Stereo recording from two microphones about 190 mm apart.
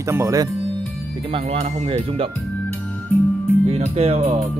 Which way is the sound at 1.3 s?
35° right (ahead or behind).